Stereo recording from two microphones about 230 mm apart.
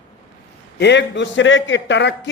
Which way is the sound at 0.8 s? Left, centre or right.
Left.